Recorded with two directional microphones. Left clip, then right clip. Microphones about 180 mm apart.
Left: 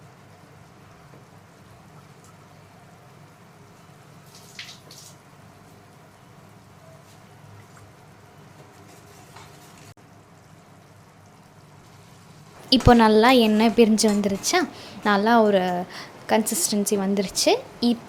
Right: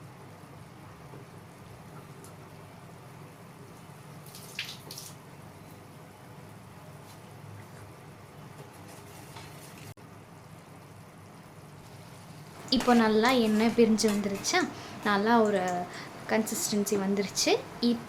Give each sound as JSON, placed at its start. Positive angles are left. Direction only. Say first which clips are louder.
{"t": 12.7, "sound": "a woman's voice", "louder": "left 9 dB", "side_deg": 45}